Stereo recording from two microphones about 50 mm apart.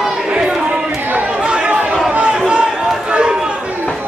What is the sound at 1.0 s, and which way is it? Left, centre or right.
Chatter, right.